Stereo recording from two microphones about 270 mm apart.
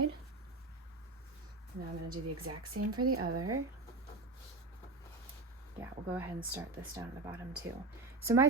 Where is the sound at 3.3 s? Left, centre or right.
Right.